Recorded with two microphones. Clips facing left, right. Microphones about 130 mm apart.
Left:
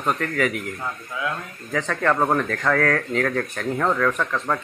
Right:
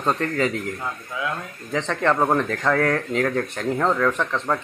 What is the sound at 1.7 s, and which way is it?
Speech, 20° right (ahead or behind).